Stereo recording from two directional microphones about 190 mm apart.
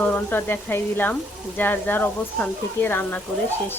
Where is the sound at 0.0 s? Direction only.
10° left (ahead or behind).